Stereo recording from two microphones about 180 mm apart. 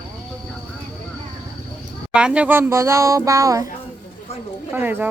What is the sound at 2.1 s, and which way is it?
Speech, 5° right (ahead or behind).